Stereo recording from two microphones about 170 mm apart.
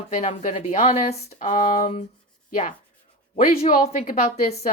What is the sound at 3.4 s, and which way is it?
A man's voice, 40° left (ahead or behind).